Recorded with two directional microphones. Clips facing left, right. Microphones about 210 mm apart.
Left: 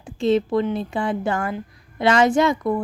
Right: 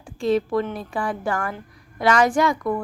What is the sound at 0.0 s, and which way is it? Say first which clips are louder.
A woman's voice: left 2 dB; 25° left (ahead or behind).